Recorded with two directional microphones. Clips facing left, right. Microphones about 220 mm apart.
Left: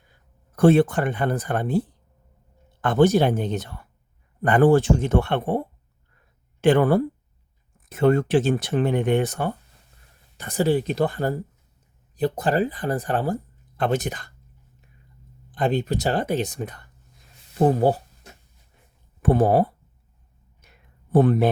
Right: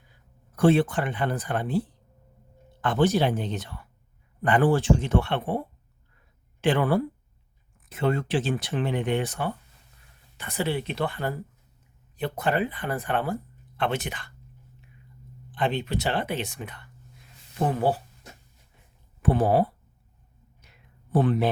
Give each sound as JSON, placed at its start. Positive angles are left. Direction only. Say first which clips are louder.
{"t": 0.5, "sound": "speech", "louder": "left 4 dB", "side_deg": 45}
{"t": 15.5, "sound": "speech", "louder": "left 4 dB", "side_deg": 40}
{"t": 19.2, "sound": "speech", "louder": "left 3 dB", "side_deg": 45}
{"t": 20.6, "sound": "a sound", "louder": "left 2 dB", "side_deg": 45}